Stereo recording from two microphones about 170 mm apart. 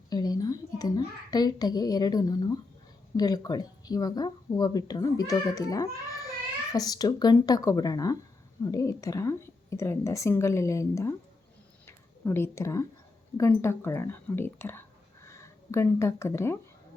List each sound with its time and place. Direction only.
0.1 s a child's voice: 25° left (ahead or behind)
11.9 s a sound: 15° left (ahead or behind)
13.3 s a woman's voice: 15° left (ahead or behind)